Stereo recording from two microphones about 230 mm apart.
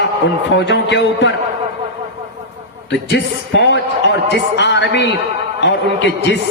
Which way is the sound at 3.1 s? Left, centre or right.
Left.